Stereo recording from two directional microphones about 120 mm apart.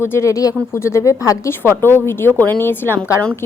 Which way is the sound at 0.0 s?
20° left (ahead or behind).